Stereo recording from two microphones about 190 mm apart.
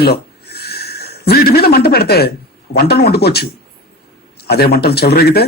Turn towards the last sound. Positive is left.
turn(degrees=55)  # may be behind; listen again after turning